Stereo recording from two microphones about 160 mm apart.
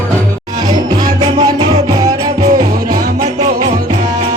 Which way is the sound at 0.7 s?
25° right (ahead or behind).